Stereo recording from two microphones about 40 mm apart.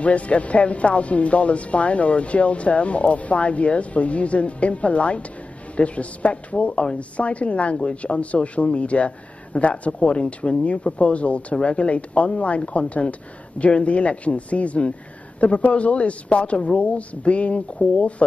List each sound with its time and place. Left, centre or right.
0.0 s speech: left